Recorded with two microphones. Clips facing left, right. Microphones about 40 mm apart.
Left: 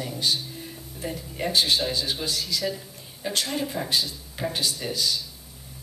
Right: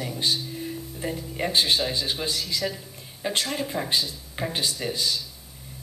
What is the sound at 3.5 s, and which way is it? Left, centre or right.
A woman's voice, centre.